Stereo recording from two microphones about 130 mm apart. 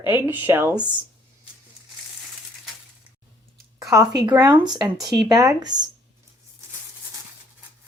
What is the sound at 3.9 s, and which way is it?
Speech, 30° right (ahead or behind).